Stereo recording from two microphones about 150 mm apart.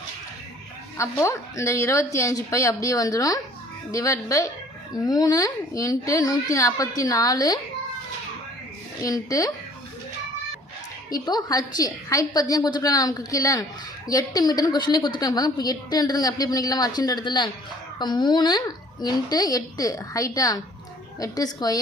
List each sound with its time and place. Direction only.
0.9 s a woman's voice: 20° left (ahead or behind)
9.0 s a woman's voice: 25° left (ahead or behind)
11.1 s a woman's voice: 25° left (ahead or behind)